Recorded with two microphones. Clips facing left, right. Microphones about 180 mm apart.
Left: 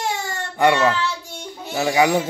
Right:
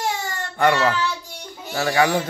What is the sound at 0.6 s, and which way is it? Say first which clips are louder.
Speech: left 2 dB; 15° left (ahead or behind).